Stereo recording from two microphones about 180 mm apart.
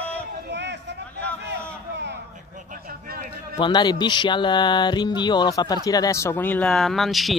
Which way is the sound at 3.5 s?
25° left (ahead or behind).